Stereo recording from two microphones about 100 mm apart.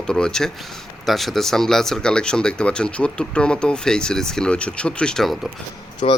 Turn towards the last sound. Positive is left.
turn(degrees=70)  # may be behind; listen again after turning